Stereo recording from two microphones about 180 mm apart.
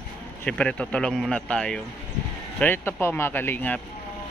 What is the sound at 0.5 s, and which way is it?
Speech, 5° left (ahead or behind).